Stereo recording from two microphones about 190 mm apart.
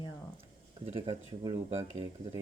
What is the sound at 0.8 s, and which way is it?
Speech, 35° right (ahead or behind).